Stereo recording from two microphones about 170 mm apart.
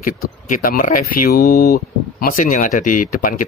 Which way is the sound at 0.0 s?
55° left (ahead or behind).